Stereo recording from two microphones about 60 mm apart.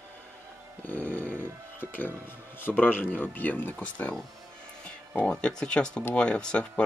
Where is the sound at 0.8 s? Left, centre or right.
Left.